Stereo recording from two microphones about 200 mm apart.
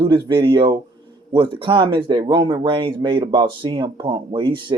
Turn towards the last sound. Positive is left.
turn(degrees=-25)  # may be behind; listen again after turning